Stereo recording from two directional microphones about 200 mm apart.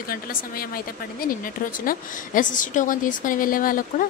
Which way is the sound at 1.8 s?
40° left (ahead or behind).